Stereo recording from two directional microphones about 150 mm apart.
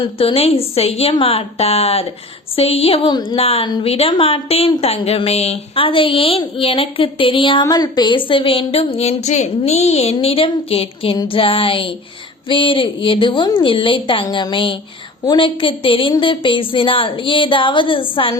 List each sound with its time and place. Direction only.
0.0 s a woman's voice: 35° left (ahead or behind)
3.3 s a woman's voice: 40° left (ahead or behind)